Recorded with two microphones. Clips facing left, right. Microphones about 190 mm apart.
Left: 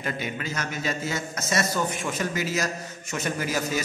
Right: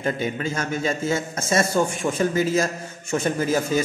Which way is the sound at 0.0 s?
30° right (ahead or behind).